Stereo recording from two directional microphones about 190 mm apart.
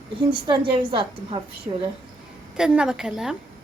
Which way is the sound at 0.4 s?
25° right (ahead or behind).